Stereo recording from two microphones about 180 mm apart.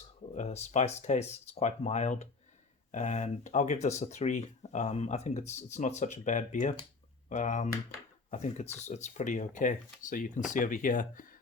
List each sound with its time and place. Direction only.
0.3 s speech: 40° left (ahead or behind)